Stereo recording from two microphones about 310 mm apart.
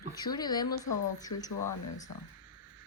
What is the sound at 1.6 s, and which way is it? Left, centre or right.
Speech, left.